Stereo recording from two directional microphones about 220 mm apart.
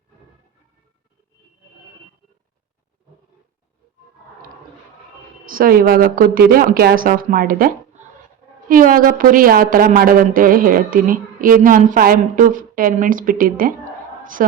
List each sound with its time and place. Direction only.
5.5 s a woman's voice: 40° right (ahead or behind)